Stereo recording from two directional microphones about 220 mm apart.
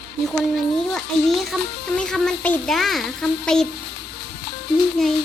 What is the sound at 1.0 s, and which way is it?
A child's voice, centre (ahead or behind).